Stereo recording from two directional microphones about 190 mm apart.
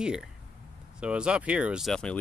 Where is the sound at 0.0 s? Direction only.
5° right (ahead or behind).